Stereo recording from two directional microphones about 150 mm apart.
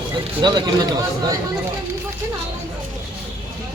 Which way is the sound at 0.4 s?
30° right (ahead or behind).